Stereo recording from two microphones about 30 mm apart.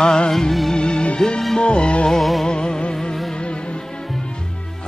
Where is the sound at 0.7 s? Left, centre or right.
Left.